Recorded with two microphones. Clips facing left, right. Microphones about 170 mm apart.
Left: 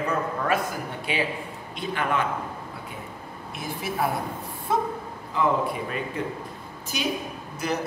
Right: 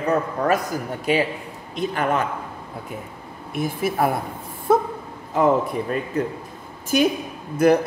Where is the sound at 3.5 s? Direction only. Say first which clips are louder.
Right 8 dB; 50° right (ahead or behind).